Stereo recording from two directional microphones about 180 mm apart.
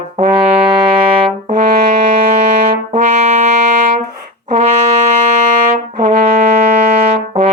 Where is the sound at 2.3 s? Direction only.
40° right (ahead or behind).